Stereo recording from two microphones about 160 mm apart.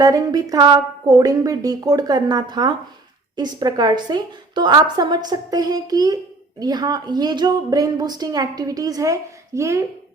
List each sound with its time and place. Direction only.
0.0 s a woman's voice: 25° right (ahead or behind)